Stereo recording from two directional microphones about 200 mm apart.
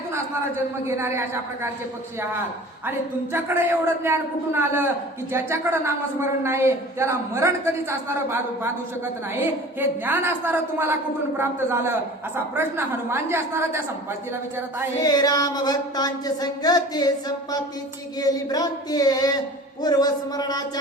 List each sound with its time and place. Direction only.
0.1 s a man's voice: 15° right (ahead or behind)
3.3 s a man's voice: 10° right (ahead or behind)
10.1 s a man's voice: 10° right (ahead or behind)
14.9 s a sound: 20° left (ahead or behind)